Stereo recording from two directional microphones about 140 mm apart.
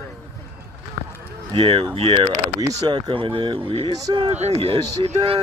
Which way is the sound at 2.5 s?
30° right (ahead or behind).